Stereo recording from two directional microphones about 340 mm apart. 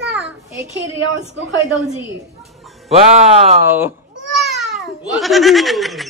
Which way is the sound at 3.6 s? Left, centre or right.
Centre.